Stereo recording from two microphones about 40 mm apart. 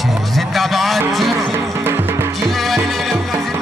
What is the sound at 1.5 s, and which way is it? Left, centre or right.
Music, right.